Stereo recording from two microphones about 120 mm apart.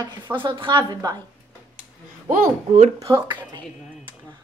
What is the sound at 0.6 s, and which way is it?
Speech, 40° right (ahead or behind).